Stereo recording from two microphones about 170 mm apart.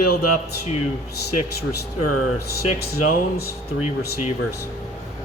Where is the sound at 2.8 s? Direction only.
65° left (ahead or behind).